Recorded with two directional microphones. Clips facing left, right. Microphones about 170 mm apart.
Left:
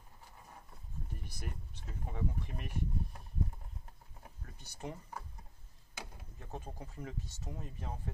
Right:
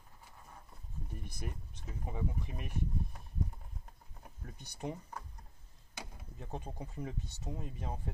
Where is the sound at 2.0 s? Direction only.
10° right (ahead or behind).